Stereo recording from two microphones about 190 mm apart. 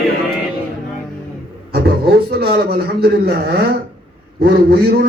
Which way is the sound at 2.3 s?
55° right (ahead or behind).